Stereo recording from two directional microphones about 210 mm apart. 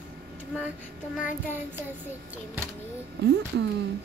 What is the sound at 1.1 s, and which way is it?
Child singing, 5° right (ahead or behind).